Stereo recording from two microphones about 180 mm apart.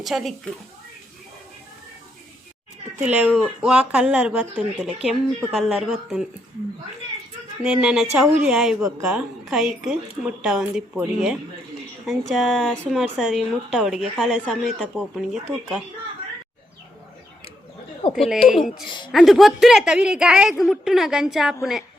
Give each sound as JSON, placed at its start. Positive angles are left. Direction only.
{"t": 0.0, "sound": "a woman's voice", "side_deg": 0}
{"t": 3.0, "sound": "a woman's voice", "side_deg": -5}
{"t": 7.6, "sound": "a woman's voice", "side_deg": -5}
{"t": 18.1, "sound": "a woman's voice", "side_deg": 0}